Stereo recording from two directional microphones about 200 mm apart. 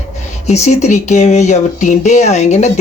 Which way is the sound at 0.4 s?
35° left (ahead or behind).